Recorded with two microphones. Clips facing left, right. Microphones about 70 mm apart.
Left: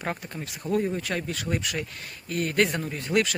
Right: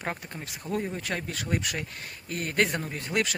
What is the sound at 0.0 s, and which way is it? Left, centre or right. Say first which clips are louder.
Speech: left 2 dB; centre.